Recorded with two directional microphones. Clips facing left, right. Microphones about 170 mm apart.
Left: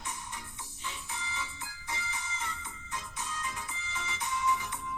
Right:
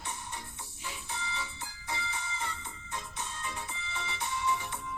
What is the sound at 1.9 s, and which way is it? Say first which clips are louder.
Music: right 2 dB; 30° right (ahead or behind).